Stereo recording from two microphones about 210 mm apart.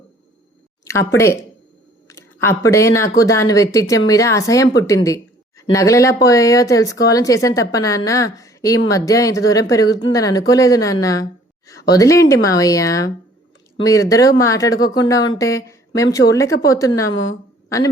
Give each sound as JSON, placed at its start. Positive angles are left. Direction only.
{"t": 0.9, "sound": "a woman's voice", "side_deg": 15}